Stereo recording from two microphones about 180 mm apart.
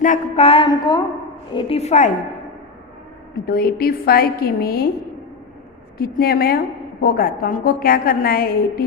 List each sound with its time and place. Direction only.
0.0 s speech: 45° left (ahead or behind)
0.4 s a woman's voice: 30° left (ahead or behind)
3.4 s a woman's voice: 55° left (ahead or behind)
6.0 s a woman's voice: 55° left (ahead or behind)